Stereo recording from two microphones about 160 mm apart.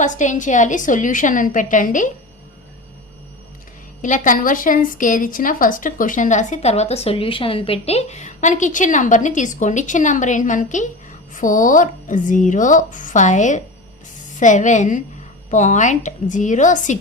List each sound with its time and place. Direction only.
0.0 s a woman's voice: 50° left (ahead or behind)
4.0 s a woman's voice: 55° left (ahead or behind)